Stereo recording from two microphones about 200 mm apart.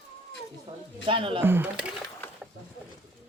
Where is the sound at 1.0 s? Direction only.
25° right (ahead or behind).